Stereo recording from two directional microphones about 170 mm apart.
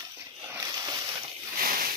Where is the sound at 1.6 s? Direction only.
60° right (ahead or behind).